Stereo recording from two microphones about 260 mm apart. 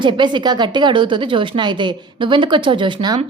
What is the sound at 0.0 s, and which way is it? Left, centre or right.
Speech, centre.